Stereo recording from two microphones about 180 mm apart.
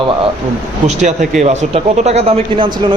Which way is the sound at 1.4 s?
40° right (ahead or behind).